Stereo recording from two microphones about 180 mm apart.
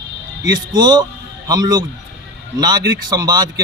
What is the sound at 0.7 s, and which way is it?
A man's voice, 25° right (ahead or behind).